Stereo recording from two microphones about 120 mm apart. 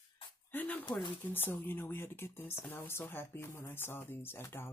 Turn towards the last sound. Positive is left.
turn(degrees=20)  # may be behind; listen again after turning